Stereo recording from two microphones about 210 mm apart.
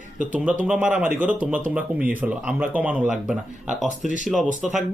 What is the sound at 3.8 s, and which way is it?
Speech, 35° right (ahead or behind).